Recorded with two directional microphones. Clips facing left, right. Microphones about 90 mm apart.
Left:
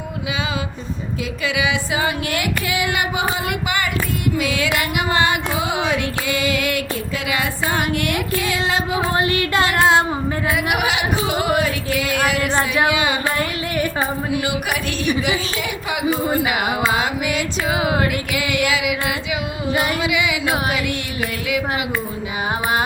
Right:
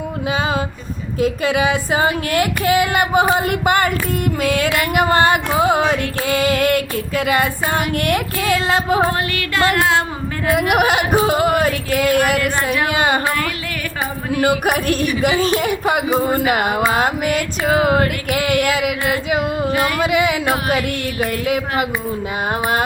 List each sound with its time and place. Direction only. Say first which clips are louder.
1.2 s child singing: right 7 dB; 45° right (ahead or behind)
9.2 s music: even; 20° left (ahead or behind)
10.5 s child singing: right 8 dB; 50° right (ahead or behind)
14.3 s child singing: right 11 dB; 45° right (ahead or behind)